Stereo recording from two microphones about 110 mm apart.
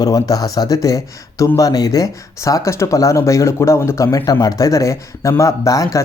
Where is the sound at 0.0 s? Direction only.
35° left (ahead or behind).